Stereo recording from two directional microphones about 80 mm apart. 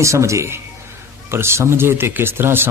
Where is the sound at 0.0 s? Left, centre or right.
Right.